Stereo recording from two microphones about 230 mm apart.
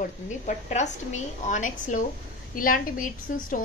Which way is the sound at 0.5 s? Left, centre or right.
Left.